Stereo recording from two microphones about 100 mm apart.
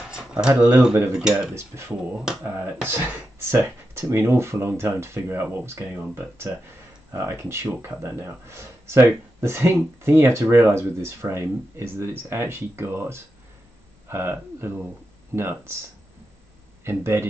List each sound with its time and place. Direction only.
0.1 s speech: 10° right (ahead or behind)
1.5 s speech: 25° right (ahead or behind)
2.1 s speech: 10° right (ahead or behind)
2.9 s speech: 20° right (ahead or behind)
16.8 s speech: 25° right (ahead or behind)